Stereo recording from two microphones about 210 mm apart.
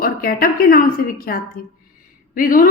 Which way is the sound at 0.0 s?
45° left (ahead or behind).